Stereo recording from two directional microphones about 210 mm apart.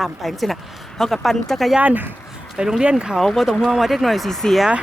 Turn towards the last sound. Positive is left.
turn(degrees=0)  # may be behind; listen again after turning